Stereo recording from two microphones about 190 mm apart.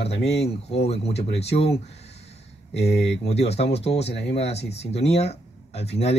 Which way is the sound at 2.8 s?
60° left (ahead or behind).